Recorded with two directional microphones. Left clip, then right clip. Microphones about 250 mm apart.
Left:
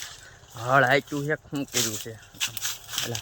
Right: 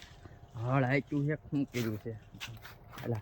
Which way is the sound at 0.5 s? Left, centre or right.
Centre.